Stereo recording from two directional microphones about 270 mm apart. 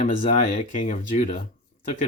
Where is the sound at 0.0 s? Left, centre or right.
Left.